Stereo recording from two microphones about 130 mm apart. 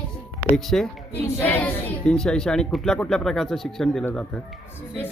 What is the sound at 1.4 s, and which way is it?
Speech, 15° left (ahead or behind).